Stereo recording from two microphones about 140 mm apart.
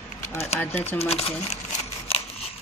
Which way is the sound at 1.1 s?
45° left (ahead or behind).